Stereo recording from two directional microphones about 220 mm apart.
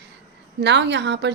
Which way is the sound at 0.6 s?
50° right (ahead or behind).